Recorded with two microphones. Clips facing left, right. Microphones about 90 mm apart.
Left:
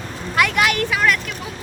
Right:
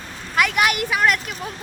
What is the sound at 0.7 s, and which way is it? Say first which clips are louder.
Speech: even; 15° right (ahead or behind).